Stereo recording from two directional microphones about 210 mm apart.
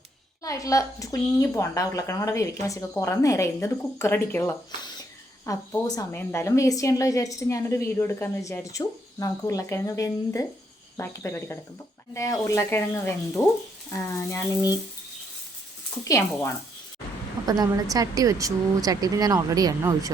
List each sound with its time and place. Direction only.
0.4 s a woman's voice: 15° left (ahead or behind)
16.0 s a woman's voice: 15° left (ahead or behind)
17.4 s a woman's voice: 20° right (ahead or behind)